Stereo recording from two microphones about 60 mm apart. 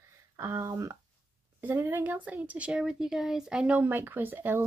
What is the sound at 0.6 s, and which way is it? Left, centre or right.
Speech, right.